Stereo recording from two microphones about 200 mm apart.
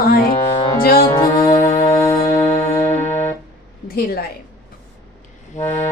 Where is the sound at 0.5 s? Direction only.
25° left (ahead or behind).